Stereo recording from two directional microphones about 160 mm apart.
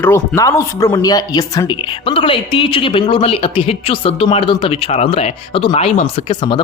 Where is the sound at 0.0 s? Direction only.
15° left (ahead or behind).